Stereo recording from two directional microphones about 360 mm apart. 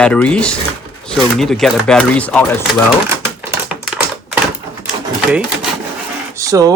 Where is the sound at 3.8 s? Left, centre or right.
Centre.